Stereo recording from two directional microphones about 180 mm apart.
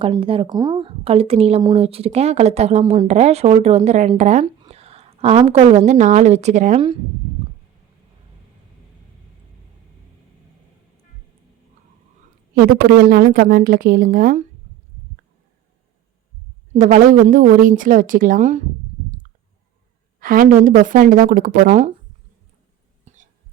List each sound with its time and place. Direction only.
0.0 s a woman's voice: 30° right (ahead or behind)
12.5 s a woman's voice: 55° right (ahead or behind)
16.7 s a woman's voice: 45° right (ahead or behind)
20.1 s a woman's voice: 50° right (ahead or behind)
23.1 s a sound: 40° right (ahead or behind)